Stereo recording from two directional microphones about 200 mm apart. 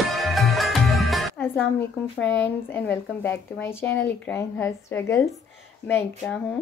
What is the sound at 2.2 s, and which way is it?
Speech, 60° left (ahead or behind).